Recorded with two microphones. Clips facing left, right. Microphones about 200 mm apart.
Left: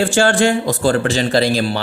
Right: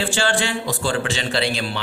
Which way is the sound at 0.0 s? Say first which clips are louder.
Left 8 dB; 45° left (ahead or behind).